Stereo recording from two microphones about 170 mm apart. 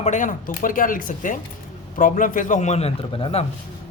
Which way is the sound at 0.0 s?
45° left (ahead or behind).